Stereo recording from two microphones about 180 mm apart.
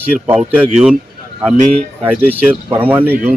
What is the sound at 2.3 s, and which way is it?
Speech, 10° right (ahead or behind).